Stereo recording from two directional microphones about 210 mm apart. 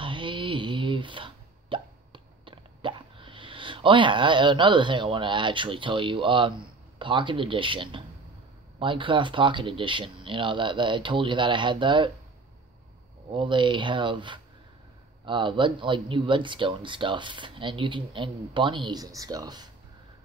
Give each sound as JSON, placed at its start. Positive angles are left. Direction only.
{"t": 0.0, "sound": "plop", "side_deg": -25}
{"t": 7.0, "sound": "speech", "side_deg": -25}
{"t": 13.3, "sound": "speech", "side_deg": -25}